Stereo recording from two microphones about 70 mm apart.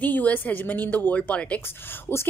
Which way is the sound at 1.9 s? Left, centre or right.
Left.